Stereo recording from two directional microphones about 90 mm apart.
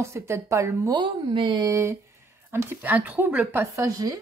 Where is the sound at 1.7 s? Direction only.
35° right (ahead or behind).